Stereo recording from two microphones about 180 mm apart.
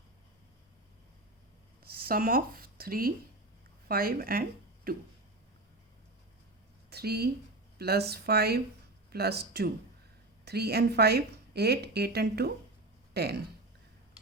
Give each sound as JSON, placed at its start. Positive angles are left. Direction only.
{"t": 1.8, "sound": "speech", "side_deg": -55}
{"t": 4.9, "sound": "a sound", "side_deg": -55}
{"t": 6.9, "sound": "speech", "side_deg": -60}